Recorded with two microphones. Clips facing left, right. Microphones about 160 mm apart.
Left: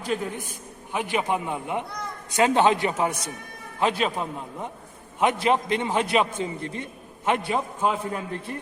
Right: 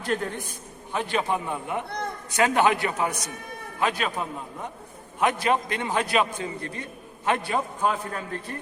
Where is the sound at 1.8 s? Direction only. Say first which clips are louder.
Right 3 dB; 60° right (ahead or behind).